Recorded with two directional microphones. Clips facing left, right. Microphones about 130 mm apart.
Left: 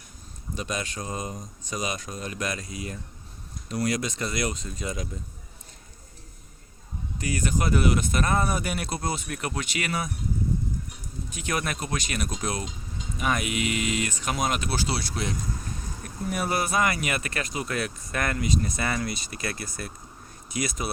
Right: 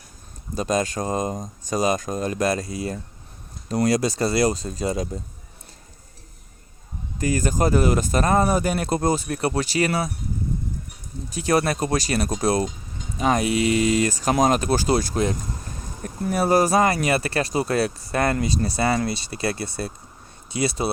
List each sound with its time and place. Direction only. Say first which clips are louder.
0.5 s speech: right 9 dB; 40° right (ahead or behind)
7.2 s speech: right 6 dB; 40° right (ahead or behind)
11.3 s speech: right 9 dB; 35° right (ahead or behind)